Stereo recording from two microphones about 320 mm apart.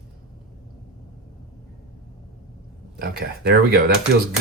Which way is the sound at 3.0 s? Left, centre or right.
Right.